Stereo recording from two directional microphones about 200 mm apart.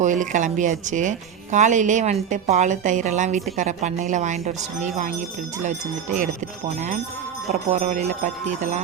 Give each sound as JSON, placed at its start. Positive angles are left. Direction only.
{"t": 0.0, "sound": "speech", "side_deg": -40}
{"t": 7.7, "sound": "speech", "side_deg": -40}